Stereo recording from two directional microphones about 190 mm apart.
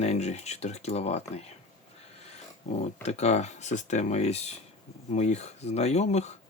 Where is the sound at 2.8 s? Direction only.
35° left (ahead or behind).